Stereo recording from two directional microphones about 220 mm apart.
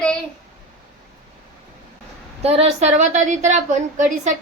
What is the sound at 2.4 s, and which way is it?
A woman's voice, 30° right (ahead or behind).